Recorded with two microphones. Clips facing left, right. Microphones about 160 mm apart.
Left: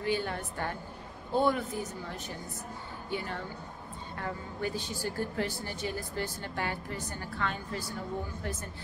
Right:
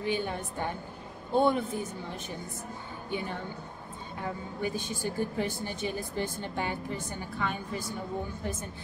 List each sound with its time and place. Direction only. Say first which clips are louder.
0.0 s a woman's voice: right 1 dB; 20° right (ahead or behind)